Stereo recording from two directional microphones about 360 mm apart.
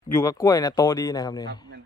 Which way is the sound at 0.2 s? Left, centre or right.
Centre.